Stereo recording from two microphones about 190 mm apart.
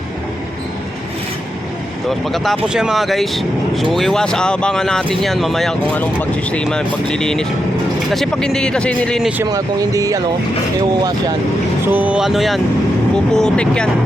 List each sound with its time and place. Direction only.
2.0 s speech: centre (ahead or behind)
9.4 s speech: 15° right (ahead or behind)
11.9 s speech: 10° right (ahead or behind)